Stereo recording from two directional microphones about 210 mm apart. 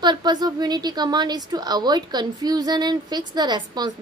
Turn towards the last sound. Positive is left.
turn(degrees=-20)  # may be behind; listen again after turning